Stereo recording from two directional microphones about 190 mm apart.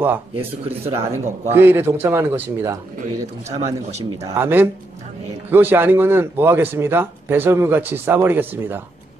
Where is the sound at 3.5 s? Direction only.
35° right (ahead or behind).